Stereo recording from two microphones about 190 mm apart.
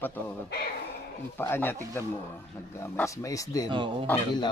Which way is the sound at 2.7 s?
15° left (ahead or behind).